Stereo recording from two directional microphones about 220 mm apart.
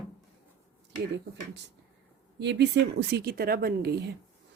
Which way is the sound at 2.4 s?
50° right (ahead or behind).